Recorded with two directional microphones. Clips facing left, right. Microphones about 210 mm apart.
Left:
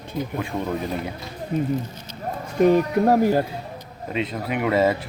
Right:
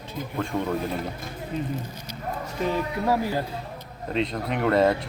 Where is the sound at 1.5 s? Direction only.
50° left (ahead or behind).